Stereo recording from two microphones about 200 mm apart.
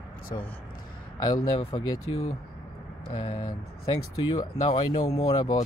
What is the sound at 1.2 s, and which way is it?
Speech, 20° left (ahead or behind).